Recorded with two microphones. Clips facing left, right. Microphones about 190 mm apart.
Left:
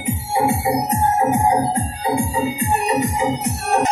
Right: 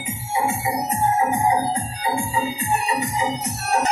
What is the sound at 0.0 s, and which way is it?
Music, 60° left (ahead or behind).